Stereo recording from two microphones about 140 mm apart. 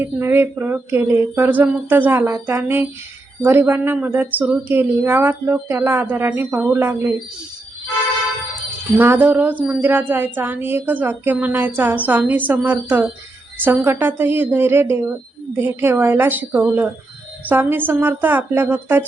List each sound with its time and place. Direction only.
0.0 s a woman's voice: 15° right (ahead or behind)
9.0 s a woman's voice: 15° right (ahead or behind)